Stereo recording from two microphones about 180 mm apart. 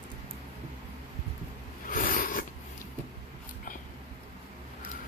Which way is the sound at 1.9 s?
50° left (ahead or behind).